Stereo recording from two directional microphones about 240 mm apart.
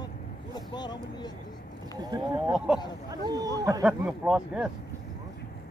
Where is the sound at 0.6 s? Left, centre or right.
Centre.